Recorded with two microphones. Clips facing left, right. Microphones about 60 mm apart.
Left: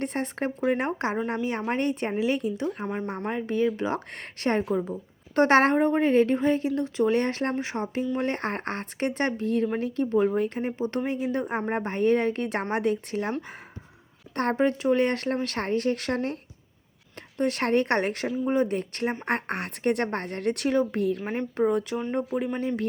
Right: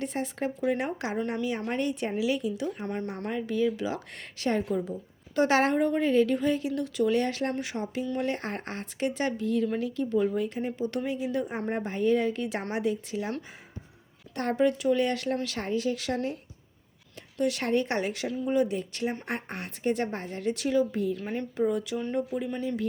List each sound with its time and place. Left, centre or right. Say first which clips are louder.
0.0 s speech: left 2 dB; left
2.8 s speech: left 2 dB; centre
3.2 s speech: left 2 dB; left
14.3 s speech: left 1 dB; left
19.2 s speech: left 6 dB; left